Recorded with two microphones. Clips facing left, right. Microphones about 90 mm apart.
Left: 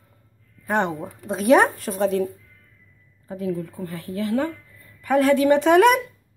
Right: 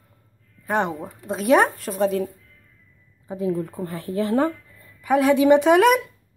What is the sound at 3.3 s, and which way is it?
Speech, 25° right (ahead or behind).